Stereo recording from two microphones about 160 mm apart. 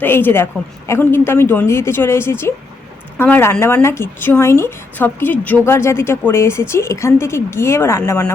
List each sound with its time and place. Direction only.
0.0 s speech: 15° left (ahead or behind)